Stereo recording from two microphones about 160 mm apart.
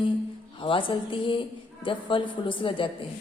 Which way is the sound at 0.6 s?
30° left (ahead or behind).